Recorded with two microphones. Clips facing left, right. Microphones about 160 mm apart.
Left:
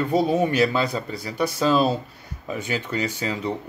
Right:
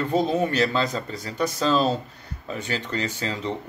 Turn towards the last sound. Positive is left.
turn(degrees=10)  # may be behind; listen again after turning